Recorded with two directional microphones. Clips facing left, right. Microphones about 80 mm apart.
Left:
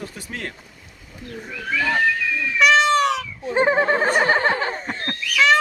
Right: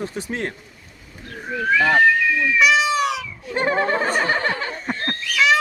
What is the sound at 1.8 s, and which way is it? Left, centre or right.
Speech, right.